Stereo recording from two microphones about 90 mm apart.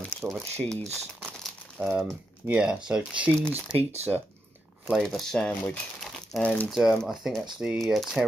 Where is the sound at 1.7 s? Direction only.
15° right (ahead or behind).